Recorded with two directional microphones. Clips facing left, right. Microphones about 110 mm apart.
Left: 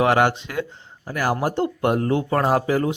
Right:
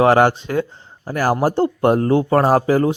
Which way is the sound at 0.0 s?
35° right (ahead or behind).